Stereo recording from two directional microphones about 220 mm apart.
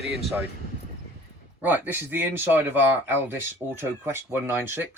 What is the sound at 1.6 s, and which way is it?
Speech, 10° right (ahead or behind).